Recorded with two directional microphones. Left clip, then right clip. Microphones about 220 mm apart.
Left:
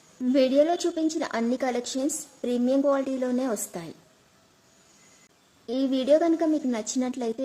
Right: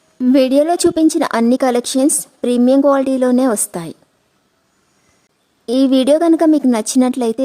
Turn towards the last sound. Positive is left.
turn(degrees=-50)  # may be behind; listen again after turning